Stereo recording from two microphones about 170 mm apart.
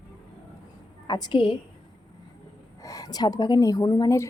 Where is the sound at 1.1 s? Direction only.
25° left (ahead or behind).